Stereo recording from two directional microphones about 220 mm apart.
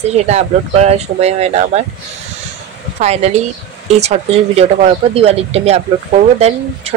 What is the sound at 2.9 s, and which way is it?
Speech, 30° right (ahead or behind).